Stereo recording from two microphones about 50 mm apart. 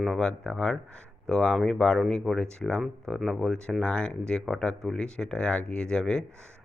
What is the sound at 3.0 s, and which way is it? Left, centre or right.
Speech, centre.